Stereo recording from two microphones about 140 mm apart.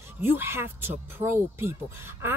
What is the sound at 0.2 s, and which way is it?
A woman's voice, 15° right (ahead or behind).